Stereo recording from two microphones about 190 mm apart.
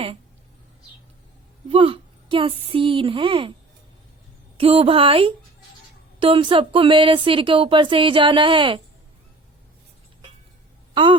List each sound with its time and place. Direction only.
1.7 s speech: 30° right (ahead or behind)
4.5 s speech: 30° right (ahead or behind)